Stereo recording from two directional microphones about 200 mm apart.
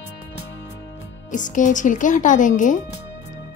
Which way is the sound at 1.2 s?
40° left (ahead or behind).